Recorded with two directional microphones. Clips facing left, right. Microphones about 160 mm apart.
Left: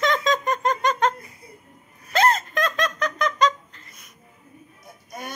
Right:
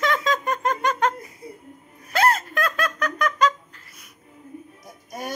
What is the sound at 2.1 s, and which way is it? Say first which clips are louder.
Laughter: left 1 dB; 10° right (ahead or behind).